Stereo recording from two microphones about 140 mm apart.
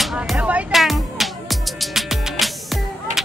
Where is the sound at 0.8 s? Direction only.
Centre (ahead or behind).